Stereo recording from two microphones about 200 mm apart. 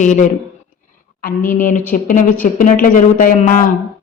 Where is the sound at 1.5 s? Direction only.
40° left (ahead or behind).